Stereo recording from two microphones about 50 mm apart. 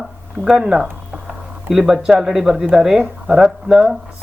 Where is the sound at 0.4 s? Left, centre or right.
Centre.